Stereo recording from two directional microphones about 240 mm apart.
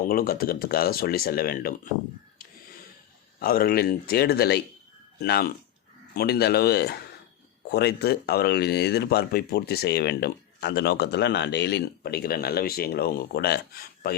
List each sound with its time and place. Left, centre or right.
0.0 s speech: left
3.4 s speech: left